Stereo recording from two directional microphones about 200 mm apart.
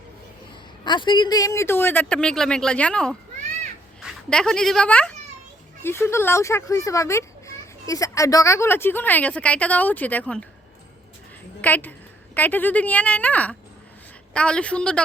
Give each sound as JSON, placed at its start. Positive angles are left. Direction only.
{"t": 0.9, "sound": "a child's voice", "side_deg": 20}
{"t": 11.6, "sound": "a woman's voice", "side_deg": 10}